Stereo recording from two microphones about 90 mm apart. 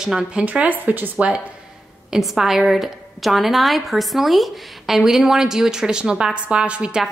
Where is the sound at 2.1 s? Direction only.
Centre (ahead or behind).